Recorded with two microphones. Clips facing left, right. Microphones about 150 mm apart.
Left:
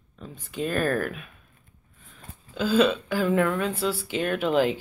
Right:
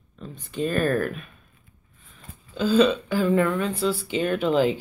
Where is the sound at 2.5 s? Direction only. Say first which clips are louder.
Right 2 dB; 5° left (ahead or behind).